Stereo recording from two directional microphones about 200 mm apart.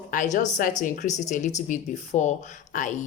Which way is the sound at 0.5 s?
40° left (ahead or behind).